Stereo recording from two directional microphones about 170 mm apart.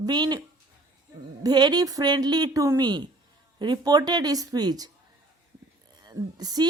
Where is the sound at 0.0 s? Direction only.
25° right (ahead or behind).